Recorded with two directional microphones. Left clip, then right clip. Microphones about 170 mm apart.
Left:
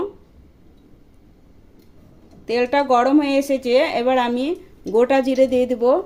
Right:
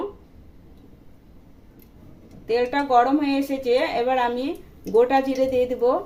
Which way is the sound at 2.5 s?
60° left (ahead or behind).